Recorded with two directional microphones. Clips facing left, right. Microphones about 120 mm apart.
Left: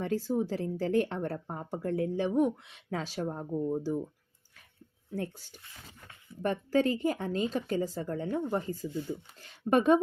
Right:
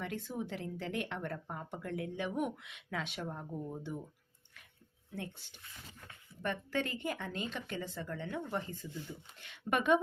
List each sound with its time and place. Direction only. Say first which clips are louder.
0.0 s speech: left 10 dB; 35° left (ahead or behind)
5.1 s speech: left 8 dB; 40° left (ahead or behind)